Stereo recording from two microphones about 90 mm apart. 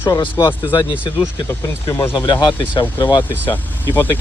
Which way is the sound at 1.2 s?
30° left (ahead or behind).